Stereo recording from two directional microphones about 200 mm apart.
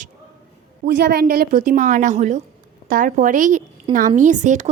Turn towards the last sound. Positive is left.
turn(degrees=-35)  # may be behind; listen again after turning